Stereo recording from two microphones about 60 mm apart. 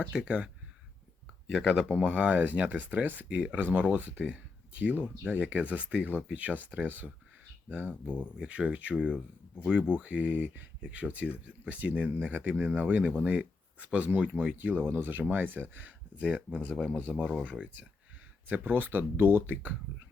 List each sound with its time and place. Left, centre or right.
0.2 s speech: centre
1.6 s speech: centre
8.0 s speech: left
8.4 s speech: centre
10.4 s speech: right
10.9 s speech: right
16.2 s speech: centre
16.9 s speech: right